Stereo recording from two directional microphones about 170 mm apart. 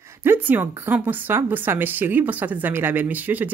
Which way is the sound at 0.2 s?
10° right (ahead or behind).